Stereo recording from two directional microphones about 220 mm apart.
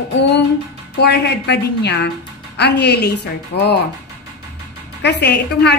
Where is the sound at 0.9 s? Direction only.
50° left (ahead or behind).